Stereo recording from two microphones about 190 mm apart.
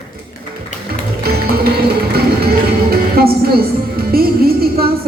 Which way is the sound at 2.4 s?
55° right (ahead or behind).